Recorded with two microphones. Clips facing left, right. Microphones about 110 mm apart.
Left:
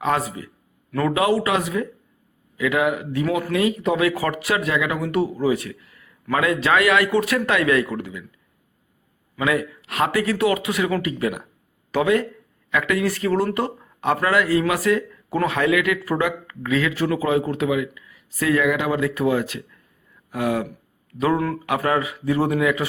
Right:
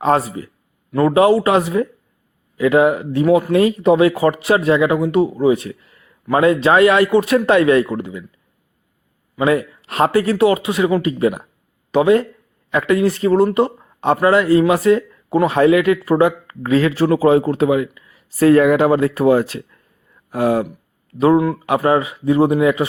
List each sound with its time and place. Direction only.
0.0 s speech: 35° right (ahead or behind)
9.4 s speech: 30° right (ahead or behind)
21.3 s speech: 15° right (ahead or behind)
21.7 s speech: 25° right (ahead or behind)